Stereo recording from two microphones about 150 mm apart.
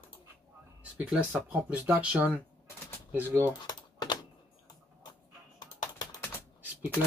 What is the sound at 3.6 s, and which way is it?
Typing, 30° left (ahead or behind).